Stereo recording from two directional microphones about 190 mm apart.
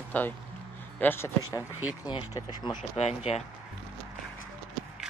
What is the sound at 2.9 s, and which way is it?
Speech, 35° left (ahead or behind).